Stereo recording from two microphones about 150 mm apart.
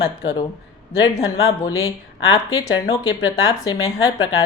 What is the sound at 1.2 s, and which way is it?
A woman's voice, 25° left (ahead or behind).